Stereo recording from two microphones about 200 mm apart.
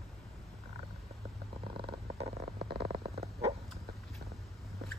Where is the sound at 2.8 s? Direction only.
30° right (ahead or behind).